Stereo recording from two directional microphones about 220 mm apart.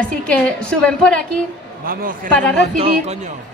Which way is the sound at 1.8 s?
40° right (ahead or behind).